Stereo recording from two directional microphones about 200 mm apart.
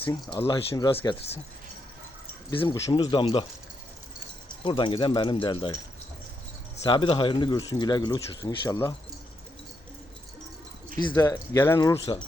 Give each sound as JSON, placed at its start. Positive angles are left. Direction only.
{"t": 0.0, "sound": "speech", "side_deg": 20}
{"t": 2.7, "sound": "speech", "side_deg": 15}
{"t": 4.6, "sound": "speech", "side_deg": 25}
{"t": 6.8, "sound": "speech", "side_deg": 25}
{"t": 11.1, "sound": "speech", "side_deg": 15}